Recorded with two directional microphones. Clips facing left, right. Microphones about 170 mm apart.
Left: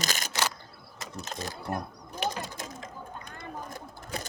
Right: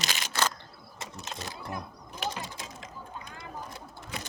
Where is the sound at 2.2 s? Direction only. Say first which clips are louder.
Left 3 dB; 50° left (ahead or behind).